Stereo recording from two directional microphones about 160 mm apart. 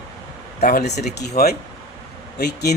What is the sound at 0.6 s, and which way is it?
Speech, 60° left (ahead or behind).